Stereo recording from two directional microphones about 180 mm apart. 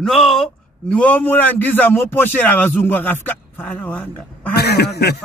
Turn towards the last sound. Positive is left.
turn(degrees=65)  # may be behind; listen again after turning